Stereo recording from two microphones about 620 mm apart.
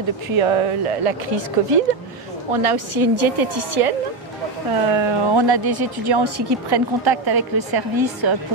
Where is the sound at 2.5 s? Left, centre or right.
Right.